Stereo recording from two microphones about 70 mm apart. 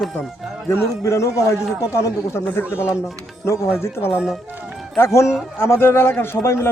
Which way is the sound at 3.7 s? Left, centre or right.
Left.